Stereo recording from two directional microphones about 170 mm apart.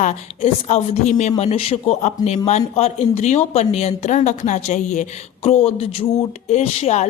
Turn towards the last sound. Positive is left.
turn(degrees=40)  # may be behind; listen again after turning